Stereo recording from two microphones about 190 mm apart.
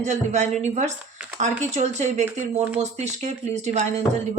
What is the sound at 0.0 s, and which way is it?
Speech, 40° right (ahead or behind).